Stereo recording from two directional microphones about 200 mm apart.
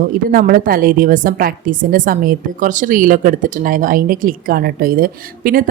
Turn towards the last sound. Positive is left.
turn(degrees=-45)  # may be behind; listen again after turning